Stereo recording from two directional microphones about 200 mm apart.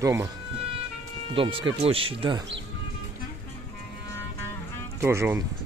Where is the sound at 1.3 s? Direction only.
25° right (ahead or behind).